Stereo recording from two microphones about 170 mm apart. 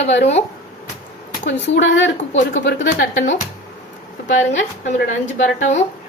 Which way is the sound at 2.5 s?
90° left.